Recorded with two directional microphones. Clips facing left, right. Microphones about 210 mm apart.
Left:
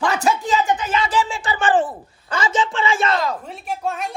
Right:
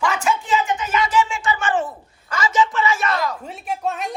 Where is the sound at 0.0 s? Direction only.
35° left (ahead or behind).